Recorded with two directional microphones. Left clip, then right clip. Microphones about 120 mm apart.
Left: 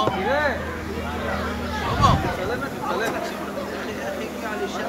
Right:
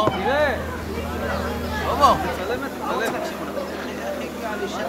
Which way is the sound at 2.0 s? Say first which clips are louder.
Right 3 dB; 30° right (ahead or behind).